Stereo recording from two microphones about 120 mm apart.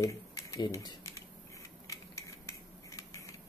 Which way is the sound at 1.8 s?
25° left (ahead or behind).